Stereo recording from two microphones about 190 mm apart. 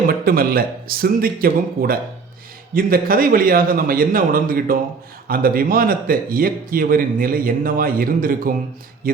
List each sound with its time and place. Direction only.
0.1 s a man's voice: 50° right (ahead or behind)